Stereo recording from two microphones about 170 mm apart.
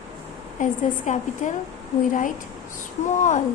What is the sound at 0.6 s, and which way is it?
Speech, 50° left (ahead or behind).